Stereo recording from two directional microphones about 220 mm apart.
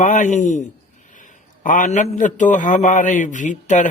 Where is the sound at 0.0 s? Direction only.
35° left (ahead or behind).